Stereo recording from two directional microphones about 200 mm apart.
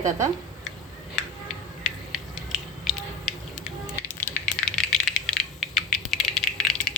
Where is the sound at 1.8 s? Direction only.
Centre (ahead or behind).